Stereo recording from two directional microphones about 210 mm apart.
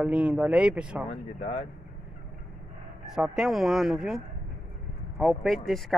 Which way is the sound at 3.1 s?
Centre (ahead or behind).